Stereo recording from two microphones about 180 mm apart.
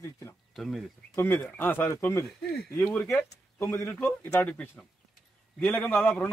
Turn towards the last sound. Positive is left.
turn(degrees=10)  # may be behind; listen again after turning